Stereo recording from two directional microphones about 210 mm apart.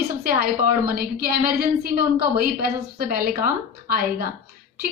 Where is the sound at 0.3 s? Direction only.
45° right (ahead or behind).